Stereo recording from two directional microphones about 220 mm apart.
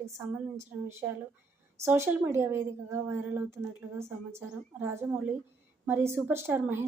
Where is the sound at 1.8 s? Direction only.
10° right (ahead or behind).